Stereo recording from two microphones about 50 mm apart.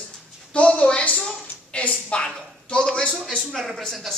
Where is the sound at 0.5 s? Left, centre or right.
Left.